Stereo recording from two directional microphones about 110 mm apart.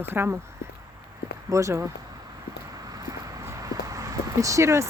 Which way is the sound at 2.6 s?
35° right (ahead or behind).